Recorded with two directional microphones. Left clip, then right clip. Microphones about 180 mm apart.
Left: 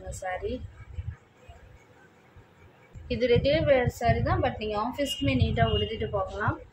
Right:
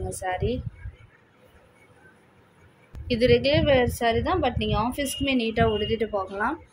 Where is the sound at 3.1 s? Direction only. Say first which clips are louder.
Right 4 dB; 50° right (ahead or behind).